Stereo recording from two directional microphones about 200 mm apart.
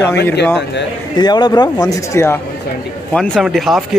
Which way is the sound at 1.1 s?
20° left (ahead or behind).